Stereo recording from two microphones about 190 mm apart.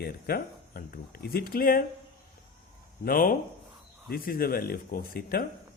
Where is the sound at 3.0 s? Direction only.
50° left (ahead or behind).